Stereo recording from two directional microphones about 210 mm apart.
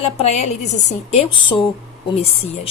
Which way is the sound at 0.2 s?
30° left (ahead or behind).